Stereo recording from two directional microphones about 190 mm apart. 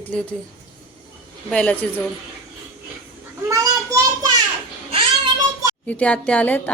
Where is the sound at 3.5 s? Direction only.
15° right (ahead or behind).